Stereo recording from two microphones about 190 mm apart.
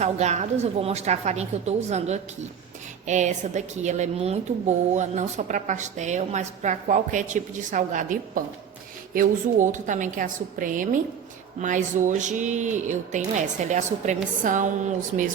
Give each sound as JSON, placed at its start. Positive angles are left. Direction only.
{"t": 0.0, "sound": "a woman's voice", "side_deg": -35}